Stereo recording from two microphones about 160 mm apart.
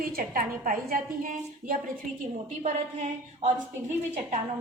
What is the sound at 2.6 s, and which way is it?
A woman's voice, 45° right (ahead or behind).